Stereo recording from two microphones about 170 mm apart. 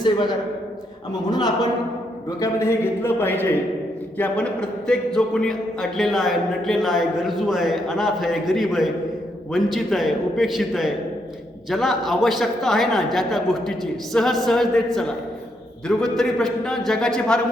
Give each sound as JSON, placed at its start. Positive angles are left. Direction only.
{"t": 0.0, "sound": "a woman's voice", "side_deg": 25}